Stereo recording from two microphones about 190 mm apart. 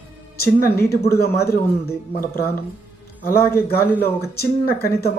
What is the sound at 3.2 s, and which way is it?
A man's voice, 50° left (ahead or behind).